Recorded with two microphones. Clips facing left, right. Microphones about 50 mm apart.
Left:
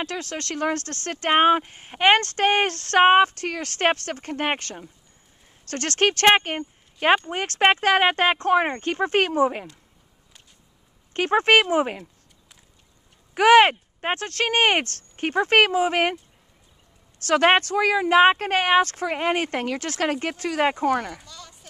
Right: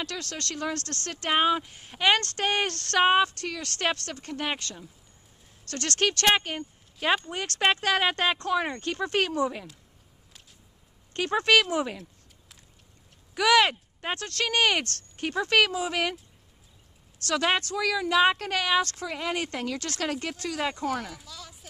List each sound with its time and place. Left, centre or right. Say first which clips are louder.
0.0 s speech: left 5 dB; left
11.1 s speech: left 4 dB; left
13.3 s speech: left 7 dB; left
17.3 s speech: left 8 dB; left
20.8 s speech: left 7 dB; centre